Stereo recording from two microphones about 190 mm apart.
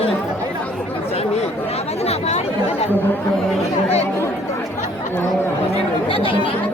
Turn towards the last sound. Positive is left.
turn(degrees=25)  # may be behind; listen again after turning